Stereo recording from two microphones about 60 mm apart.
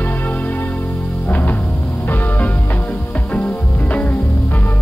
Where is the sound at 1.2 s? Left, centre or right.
Left.